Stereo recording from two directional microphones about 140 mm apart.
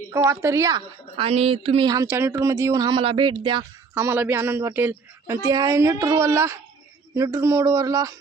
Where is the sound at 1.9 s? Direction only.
20° right (ahead or behind); by 3.6 s 35° right (ahead or behind).